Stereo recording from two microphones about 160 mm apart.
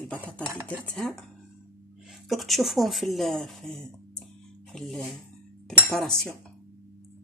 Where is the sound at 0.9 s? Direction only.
5° left (ahead or behind).